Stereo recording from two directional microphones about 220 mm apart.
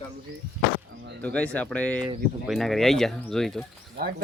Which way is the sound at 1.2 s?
5° left (ahead or behind).